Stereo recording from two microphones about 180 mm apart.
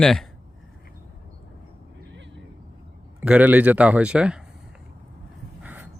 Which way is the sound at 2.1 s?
85° right.